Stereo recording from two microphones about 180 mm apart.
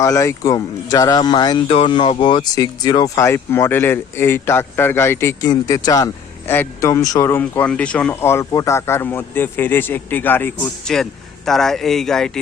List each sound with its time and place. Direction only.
0.0 s speech: 15° left (ahead or behind)